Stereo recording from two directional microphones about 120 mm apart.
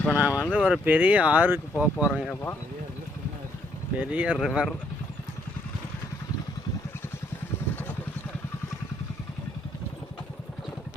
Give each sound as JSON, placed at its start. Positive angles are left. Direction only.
{"t": 0.1, "sound": "speech", "side_deg": -10}
{"t": 2.3, "sound": "speech", "side_deg": 20}
{"t": 4.0, "sound": "speech", "side_deg": -10}